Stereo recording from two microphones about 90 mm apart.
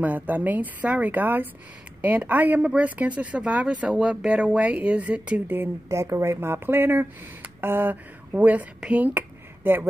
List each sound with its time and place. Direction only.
0.0 s speech: 20° right (ahead or behind)
5.9 s speech: 35° right (ahead or behind)